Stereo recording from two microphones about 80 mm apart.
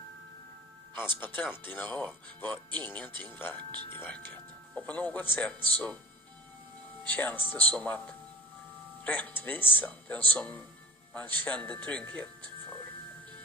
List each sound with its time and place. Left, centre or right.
0.9 s speech: left
5.5 s speech: right
7.1 s speech: left